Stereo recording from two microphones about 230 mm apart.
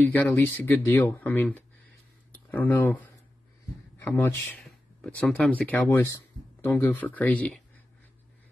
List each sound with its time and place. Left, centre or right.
0.0 s speech: centre
4.0 s speech: centre